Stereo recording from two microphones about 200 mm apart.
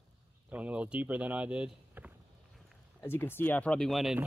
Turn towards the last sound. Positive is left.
turn(degrees=0)  # may be behind; listen again after turning